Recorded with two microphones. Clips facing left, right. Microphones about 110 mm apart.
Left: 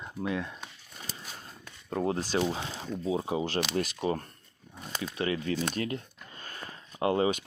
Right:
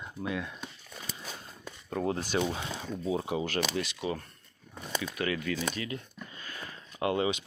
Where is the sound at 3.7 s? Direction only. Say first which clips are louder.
Left 3 dB; 45° left (ahead or behind).